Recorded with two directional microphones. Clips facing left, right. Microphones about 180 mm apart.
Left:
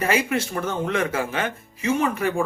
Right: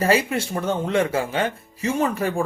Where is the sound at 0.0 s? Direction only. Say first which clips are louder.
Right 2 dB; 30° right (ahead or behind).